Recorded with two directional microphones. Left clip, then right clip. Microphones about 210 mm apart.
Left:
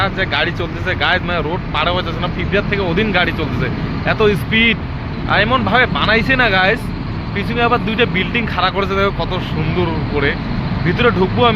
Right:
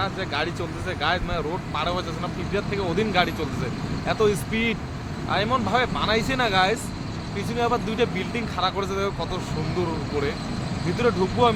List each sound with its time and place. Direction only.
0.0 s speech: 10° right (ahead or behind)
10.9 s speech: 15° right (ahead or behind)